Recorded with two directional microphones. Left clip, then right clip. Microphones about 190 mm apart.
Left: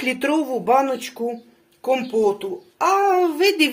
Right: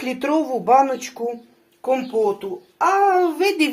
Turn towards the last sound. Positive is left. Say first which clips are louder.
# left 1 dB
turn(degrees=25)  # may be behind; listen again after turning